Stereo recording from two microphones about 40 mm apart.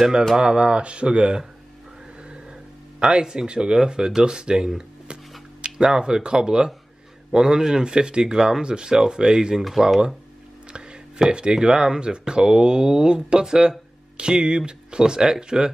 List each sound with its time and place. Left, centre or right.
0.4 s speech: centre
3.0 s speech: right
5.0 s a sound: right
5.9 s speech: centre
10.7 s speech: right